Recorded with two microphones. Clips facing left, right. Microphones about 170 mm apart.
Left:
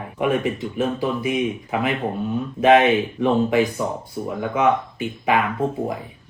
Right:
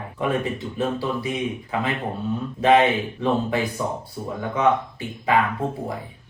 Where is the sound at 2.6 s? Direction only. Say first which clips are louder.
Left 2 dB; 20° left (ahead or behind).